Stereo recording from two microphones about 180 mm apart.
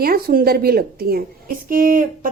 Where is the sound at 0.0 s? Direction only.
55° right (ahead or behind).